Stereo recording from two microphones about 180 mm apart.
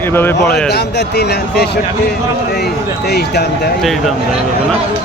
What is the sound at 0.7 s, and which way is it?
Speech, 65° left (ahead or behind).